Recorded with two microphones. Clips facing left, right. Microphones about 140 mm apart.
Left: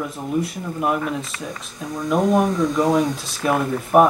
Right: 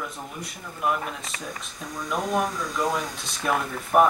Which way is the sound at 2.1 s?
45° left (ahead or behind).